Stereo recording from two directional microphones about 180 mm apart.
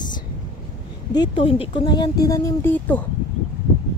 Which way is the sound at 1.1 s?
25° left (ahead or behind).